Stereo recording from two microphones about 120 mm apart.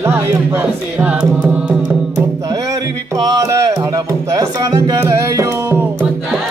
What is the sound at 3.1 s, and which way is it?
Music, 30° right (ahead or behind).